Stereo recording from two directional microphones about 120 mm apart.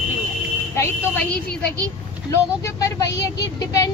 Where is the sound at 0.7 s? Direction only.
20° left (ahead or behind).